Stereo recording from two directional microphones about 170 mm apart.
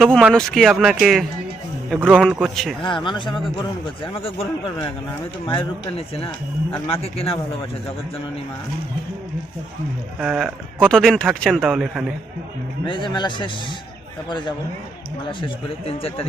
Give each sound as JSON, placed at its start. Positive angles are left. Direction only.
{"t": 0.0, "sound": "speech", "side_deg": -5}
{"t": 2.8, "sound": "speech", "side_deg": 30}
{"t": 10.2, "sound": "speech", "side_deg": -5}
{"t": 12.8, "sound": "speech", "side_deg": 30}